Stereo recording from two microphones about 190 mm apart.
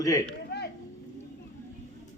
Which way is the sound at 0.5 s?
60° left (ahead or behind).